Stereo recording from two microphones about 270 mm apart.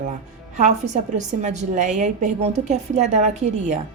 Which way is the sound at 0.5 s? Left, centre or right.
Right.